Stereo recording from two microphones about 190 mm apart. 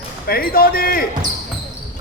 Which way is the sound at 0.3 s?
50° left (ahead or behind).